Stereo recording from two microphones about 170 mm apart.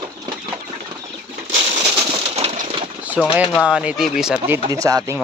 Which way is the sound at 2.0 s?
35° right (ahead or behind).